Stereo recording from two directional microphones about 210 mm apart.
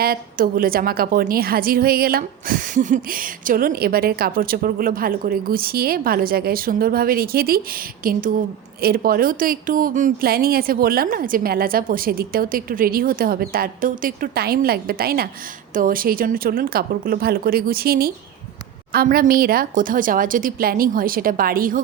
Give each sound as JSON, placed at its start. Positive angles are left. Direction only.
{"t": 0.0, "sound": "a woman's voice", "side_deg": -45}